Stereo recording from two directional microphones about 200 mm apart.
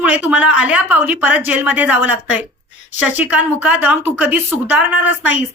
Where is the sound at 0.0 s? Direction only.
5° right (ahead or behind).